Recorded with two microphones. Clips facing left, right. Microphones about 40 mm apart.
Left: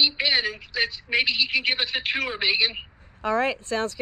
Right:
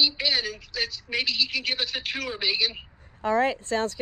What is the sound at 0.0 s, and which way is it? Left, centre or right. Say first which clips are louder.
A woman's voice: left 2 dB; left.